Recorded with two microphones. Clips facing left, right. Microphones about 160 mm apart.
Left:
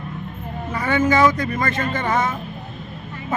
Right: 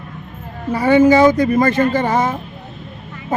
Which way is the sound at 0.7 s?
30° right (ahead or behind).